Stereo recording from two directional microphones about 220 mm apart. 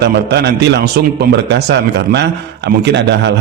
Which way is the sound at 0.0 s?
50° right (ahead or behind).